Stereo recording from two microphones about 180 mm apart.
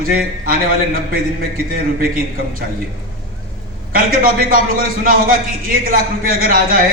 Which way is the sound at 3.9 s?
55° right (ahead or behind).